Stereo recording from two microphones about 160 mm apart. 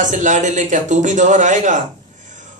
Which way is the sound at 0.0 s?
50° right (ahead or behind).